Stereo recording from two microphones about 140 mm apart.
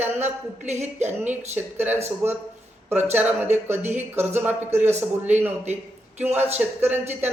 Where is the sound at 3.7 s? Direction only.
55° right (ahead or behind).